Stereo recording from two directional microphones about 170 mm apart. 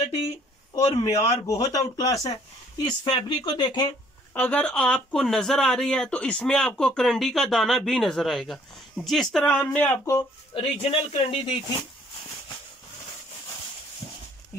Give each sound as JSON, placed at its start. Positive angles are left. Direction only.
{"t": 1.0, "sound": "speech", "side_deg": 20}
{"t": 4.3, "sound": "speech", "side_deg": 10}
{"t": 10.5, "sound": "speech", "side_deg": 35}
{"t": 14.5, "sound": "a sound", "side_deg": 15}